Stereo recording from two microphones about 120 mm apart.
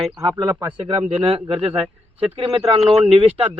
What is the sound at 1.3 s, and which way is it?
Speech, 50° right (ahead or behind).